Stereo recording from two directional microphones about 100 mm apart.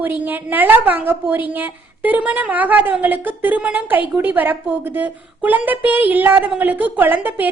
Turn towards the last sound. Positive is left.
turn(degrees=-20)  # may be behind; listen again after turning